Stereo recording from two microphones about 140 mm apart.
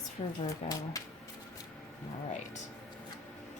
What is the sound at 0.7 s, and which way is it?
Speech, 25° left (ahead or behind).